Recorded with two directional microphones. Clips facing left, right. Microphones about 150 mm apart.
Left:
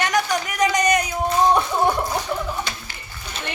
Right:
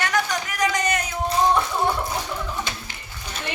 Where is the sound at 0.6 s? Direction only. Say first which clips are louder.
Left 4 dB; 20° left (ahead or behind).